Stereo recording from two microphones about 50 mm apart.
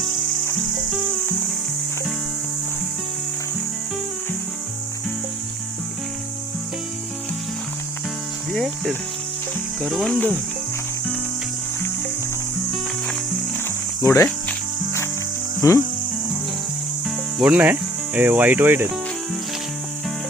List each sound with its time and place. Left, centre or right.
8.5 s speech: centre
9.9 s speech: centre
14.0 s speech: left
15.6 s speech: left
17.1 s cricket: centre
17.6 s speech: right